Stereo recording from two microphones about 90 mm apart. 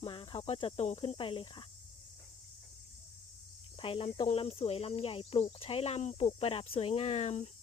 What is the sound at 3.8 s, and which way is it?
Speech, 80° left.